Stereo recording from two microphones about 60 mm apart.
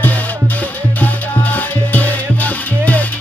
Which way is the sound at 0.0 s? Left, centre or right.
Left.